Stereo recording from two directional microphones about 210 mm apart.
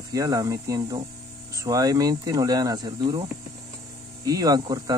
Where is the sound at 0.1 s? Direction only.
15° right (ahead or behind).